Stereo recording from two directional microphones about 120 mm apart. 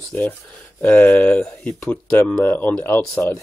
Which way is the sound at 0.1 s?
15° left (ahead or behind).